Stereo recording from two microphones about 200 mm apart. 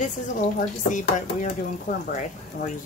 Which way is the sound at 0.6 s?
40° left (ahead or behind).